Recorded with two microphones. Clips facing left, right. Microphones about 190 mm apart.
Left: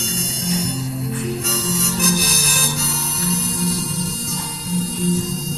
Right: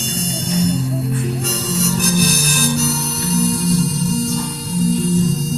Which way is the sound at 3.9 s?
35° left (ahead or behind).